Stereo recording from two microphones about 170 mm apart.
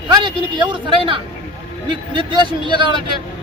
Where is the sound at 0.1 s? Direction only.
30° right (ahead or behind).